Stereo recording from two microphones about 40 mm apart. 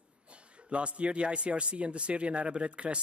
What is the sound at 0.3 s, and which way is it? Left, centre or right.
Speech, right.